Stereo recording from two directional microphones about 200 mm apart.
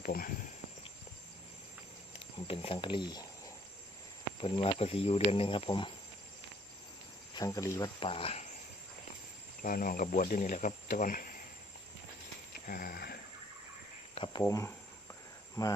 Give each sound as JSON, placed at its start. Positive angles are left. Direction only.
{"t": 0.0, "sound": "speech", "side_deg": 45}
{"t": 2.1, "sound": "speech", "side_deg": 30}
{"t": 7.3, "sound": "speech", "side_deg": 15}
{"t": 7.9, "sound": "speech", "side_deg": 25}
{"t": 9.6, "sound": "speech", "side_deg": 45}
{"t": 12.6, "sound": "speech", "side_deg": 45}
{"t": 14.4, "sound": "speech", "side_deg": 15}